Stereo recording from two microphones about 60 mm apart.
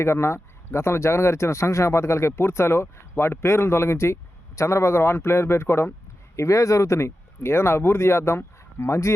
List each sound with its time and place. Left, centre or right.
0.0 s speech: left
6.3 s speech: left